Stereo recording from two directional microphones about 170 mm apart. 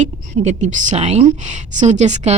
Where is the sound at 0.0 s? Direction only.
45° right (ahead or behind).